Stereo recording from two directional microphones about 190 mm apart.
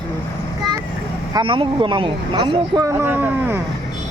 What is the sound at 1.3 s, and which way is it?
Speech, 25° right (ahead or behind).